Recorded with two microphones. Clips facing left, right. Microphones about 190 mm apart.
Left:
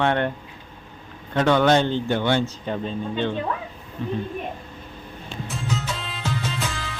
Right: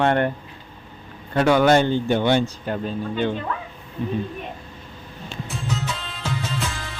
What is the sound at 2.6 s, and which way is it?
Speech, 5° right (ahead or behind).